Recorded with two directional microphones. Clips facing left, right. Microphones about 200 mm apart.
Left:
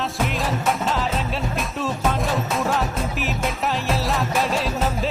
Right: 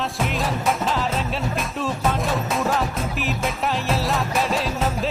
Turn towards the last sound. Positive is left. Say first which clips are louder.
# even
turn(degrees=0)  # may be behind; listen again after turning